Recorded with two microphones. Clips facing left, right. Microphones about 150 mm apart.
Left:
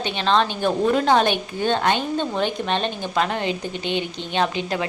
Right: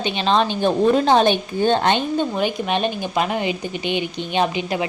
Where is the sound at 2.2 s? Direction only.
10° right (ahead or behind).